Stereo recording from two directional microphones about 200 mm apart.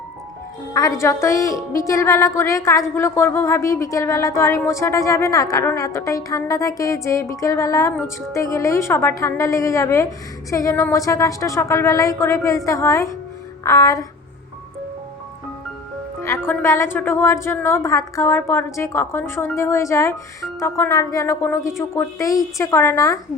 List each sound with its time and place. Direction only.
0.7 s a woman's voice: 15° left (ahead or behind)
16.2 s a woman's voice: 10° left (ahead or behind)